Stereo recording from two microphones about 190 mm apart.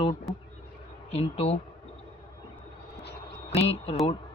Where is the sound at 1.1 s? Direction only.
30° left (ahead or behind).